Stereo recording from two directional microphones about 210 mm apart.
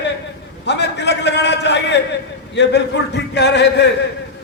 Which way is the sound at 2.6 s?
55° left (ahead or behind).